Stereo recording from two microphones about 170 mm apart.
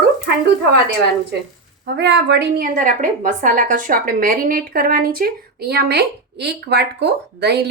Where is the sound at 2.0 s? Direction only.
80° right.